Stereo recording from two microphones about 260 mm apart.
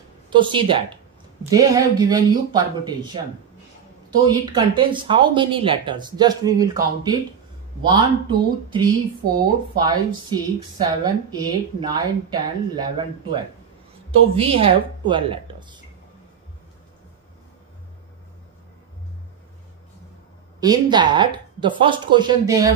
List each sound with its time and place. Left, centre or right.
0.3 s a woman's voice: centre
14.1 s a woman's voice: right
20.6 s speech: centre